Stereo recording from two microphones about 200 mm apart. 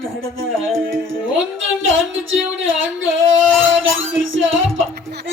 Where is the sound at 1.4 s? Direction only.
75° right (ahead or behind).